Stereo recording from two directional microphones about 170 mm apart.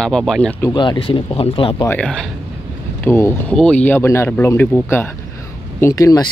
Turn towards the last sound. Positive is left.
turn(degrees=20)  # may be behind; listen again after turning